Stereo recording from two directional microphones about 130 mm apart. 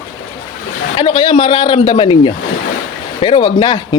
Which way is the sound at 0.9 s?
35° left (ahead or behind).